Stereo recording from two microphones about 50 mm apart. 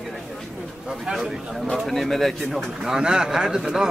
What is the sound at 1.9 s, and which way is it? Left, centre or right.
Speech, centre.